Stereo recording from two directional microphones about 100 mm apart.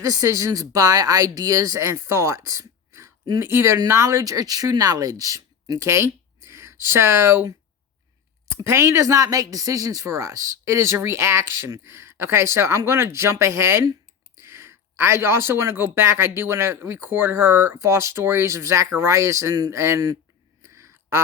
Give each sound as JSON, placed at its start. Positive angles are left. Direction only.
{"t": 0.0, "sound": "speech", "side_deg": -30}
{"t": 8.4, "sound": "speech", "side_deg": -25}
{"t": 20.7, "sound": "a sound", "side_deg": -30}